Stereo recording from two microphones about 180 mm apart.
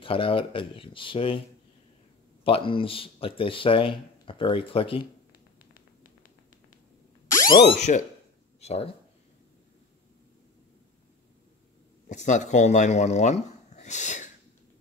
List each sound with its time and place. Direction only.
0.0 s speech: 30° left (ahead or behind)
2.4 s speech: 30° left (ahead or behind)
7.3 s a sound: 20° left (ahead or behind)
8.5 s speech: 35° left (ahead or behind)
12.1 s speech: 40° left (ahead or behind)